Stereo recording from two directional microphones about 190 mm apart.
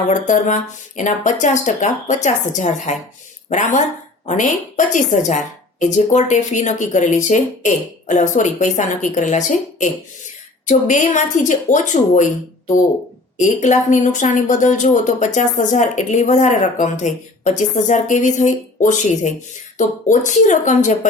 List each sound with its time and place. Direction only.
0.1 s a woman's voice: 40° left (ahead or behind)